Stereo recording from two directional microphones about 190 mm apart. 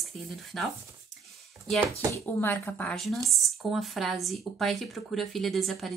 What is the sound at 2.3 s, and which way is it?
A woman's voice, 10° left (ahead or behind).